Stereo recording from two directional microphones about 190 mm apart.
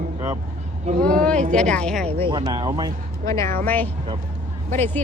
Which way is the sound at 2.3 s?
25° right (ahead or behind).